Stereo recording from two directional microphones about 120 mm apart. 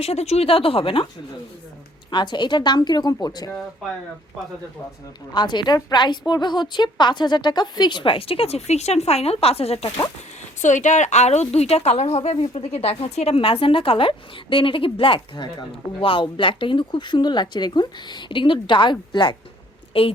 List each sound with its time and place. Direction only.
0.0 s speech: 60° left (ahead or behind)
2.0 s a woman's voice: 40° left (ahead or behind)
5.3 s a woman's voice: 40° left (ahead or behind); by 9.9 s 60° left (ahead or behind)
10.6 s a woman's voice: 90° left; by 19.4 s 40° left (ahead or behind)
19.9 s a woman's voice: 50° left (ahead or behind)